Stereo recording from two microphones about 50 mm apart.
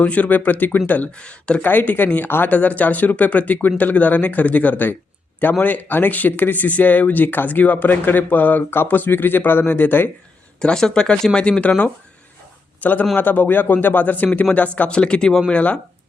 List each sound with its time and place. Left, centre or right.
0.0 s speech: left
1.1 s speech: left
1.6 s speech: left
10.6 s speech: centre
11.6 s speech: left
12.8 s a man's voice: left
14.8 s speech: left